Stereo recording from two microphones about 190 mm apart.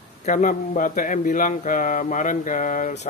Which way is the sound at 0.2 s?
45° left (ahead or behind).